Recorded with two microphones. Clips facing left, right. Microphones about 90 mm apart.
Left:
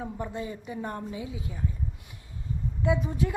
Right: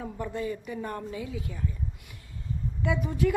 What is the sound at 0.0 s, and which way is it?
A woman's voice, 20° left (ahead or behind).